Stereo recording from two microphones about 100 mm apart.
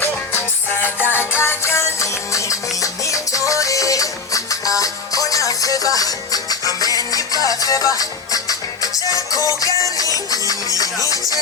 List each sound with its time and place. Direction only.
0.7 s music: 20° left (ahead or behind); by 11.2 s 35° left (ahead or behind)